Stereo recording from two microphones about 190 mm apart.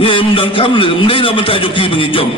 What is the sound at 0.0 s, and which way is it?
A man's voice, 25° left (ahead or behind).